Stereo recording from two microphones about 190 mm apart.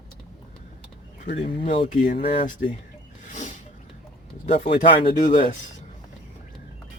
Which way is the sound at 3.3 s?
40° left (ahead or behind).